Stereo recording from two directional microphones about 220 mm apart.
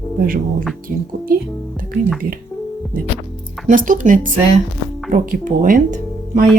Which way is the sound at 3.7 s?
35° right (ahead or behind).